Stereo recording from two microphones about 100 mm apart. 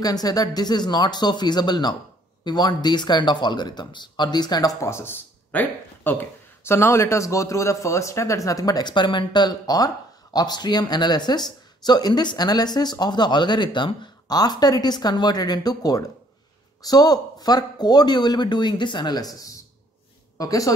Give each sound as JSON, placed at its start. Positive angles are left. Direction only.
{"t": 0.0, "sound": "speech", "side_deg": 40}